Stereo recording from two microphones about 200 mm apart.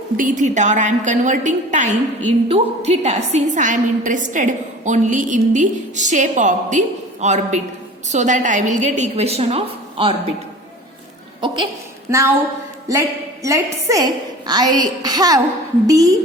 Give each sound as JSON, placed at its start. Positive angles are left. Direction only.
{"t": 0.2, "sound": "a woman's voice", "side_deg": -40}
{"t": 11.3, "sound": "a woman's voice", "side_deg": -25}
{"t": 12.1, "sound": "a woman's voice", "side_deg": -15}